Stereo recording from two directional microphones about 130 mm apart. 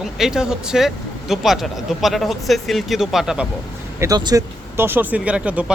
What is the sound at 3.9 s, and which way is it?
Speech, 25° right (ahead or behind).